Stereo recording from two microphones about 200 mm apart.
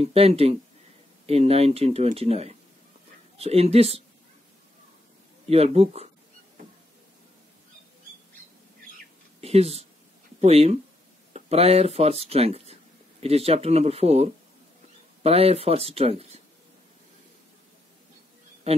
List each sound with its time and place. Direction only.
0.0 s speech: 30° right (ahead or behind)
5.5 s speech: 30° right (ahead or behind)
9.4 s speech: 30° right (ahead or behind)